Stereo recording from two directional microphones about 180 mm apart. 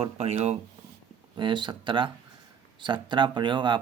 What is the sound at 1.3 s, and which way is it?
Speech, 25° right (ahead or behind).